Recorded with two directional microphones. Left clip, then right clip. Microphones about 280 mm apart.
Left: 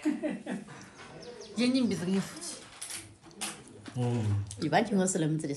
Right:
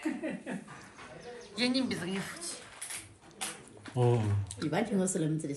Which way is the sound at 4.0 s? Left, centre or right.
Right.